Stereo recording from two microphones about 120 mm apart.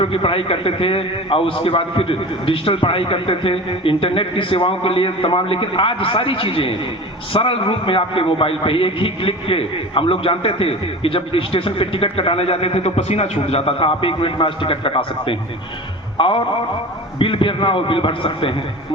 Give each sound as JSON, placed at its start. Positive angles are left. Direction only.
{"t": 0.0, "sound": "a man's voice", "side_deg": 45}